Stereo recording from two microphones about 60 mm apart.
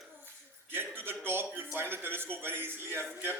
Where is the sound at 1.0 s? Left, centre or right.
Right.